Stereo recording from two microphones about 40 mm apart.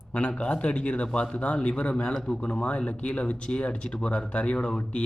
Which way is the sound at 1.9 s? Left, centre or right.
Left.